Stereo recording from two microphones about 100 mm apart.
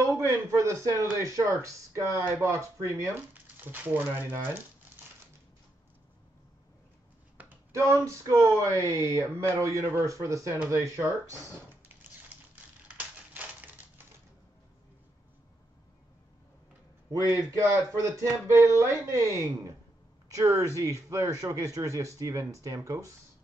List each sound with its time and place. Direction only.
0.0 s a man's voice: 30° right (ahead or behind)
3.5 s speech: 20° right (ahead or behind)
7.7 s speech: 30° right (ahead or behind)
12.8 s typewriter: 15° right (ahead or behind)
17.3 s speech: 30° right (ahead or behind)